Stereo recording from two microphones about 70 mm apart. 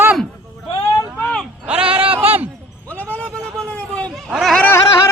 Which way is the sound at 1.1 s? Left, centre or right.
Centre.